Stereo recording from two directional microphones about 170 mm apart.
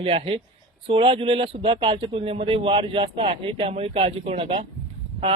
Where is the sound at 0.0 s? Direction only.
35° right (ahead or behind).